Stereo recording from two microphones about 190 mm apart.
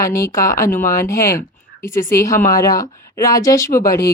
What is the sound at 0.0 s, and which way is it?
Speech, 15° left (ahead or behind).